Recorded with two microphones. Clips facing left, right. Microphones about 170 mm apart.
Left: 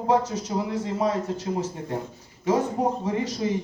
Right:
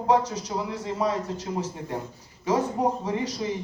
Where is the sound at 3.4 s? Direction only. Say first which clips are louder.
Left 6 dB; 30° left (ahead or behind).